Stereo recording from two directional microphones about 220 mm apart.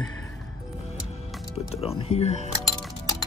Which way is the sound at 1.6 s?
25° left (ahead or behind).